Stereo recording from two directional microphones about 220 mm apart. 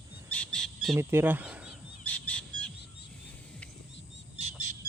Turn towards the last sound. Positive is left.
turn(degrees=-30)  # may be behind; listen again after turning